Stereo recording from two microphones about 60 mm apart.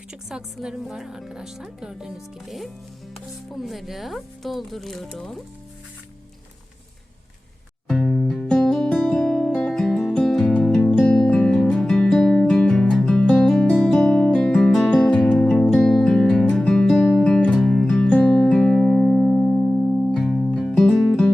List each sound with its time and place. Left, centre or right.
0.1 s a woman's voice: centre
7.9 s music: centre
13.7 s guitar: centre
14.8 s music: centre
18.1 s music: left
20.1 s music: centre